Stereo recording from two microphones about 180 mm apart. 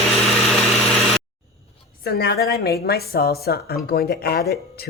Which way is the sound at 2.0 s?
60° left (ahead or behind).